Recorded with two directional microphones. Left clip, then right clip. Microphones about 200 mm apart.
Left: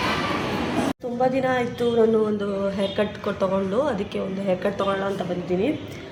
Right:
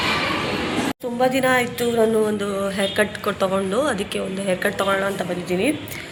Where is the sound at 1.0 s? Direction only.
5° right (ahead or behind).